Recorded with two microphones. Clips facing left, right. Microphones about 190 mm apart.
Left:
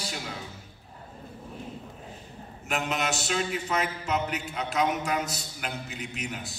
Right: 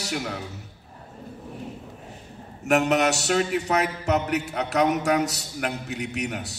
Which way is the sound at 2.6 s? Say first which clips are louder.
Right 9 dB; 70° right (ahead or behind).